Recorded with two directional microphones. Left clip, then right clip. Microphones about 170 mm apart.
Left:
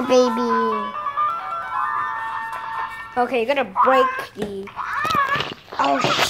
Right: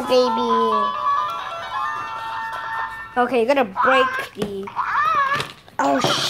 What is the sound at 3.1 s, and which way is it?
Speech, 15° right (ahead or behind).